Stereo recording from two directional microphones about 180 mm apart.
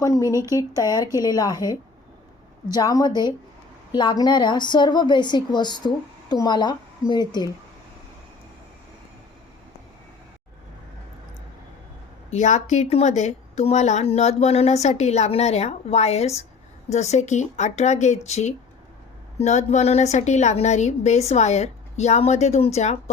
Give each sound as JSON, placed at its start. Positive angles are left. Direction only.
{"t": 0.0, "sound": "speech", "side_deg": 15}
{"t": 0.3, "sound": "speech", "side_deg": -15}
{"t": 1.2, "sound": "a woman's voice", "side_deg": 20}
{"t": 12.3, "sound": "a woman's voice", "side_deg": 40}